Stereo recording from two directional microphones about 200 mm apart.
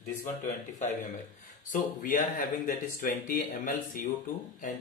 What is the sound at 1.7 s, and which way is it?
Speech, 45° left (ahead or behind).